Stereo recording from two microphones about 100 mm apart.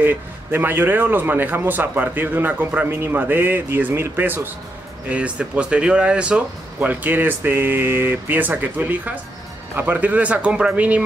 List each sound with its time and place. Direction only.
0.0 s speech: 20° right (ahead or behind)